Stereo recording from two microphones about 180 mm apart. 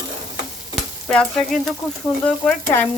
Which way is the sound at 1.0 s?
Centre (ahead or behind).